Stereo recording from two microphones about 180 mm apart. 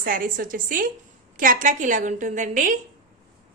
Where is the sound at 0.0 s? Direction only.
50° right (ahead or behind).